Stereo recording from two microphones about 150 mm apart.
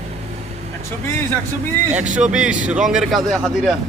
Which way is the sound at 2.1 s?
55° right (ahead or behind).